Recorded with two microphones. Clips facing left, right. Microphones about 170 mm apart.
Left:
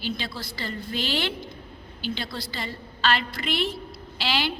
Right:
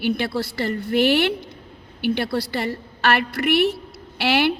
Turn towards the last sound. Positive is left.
turn(degrees=-60)  # may be behind; listen again after turning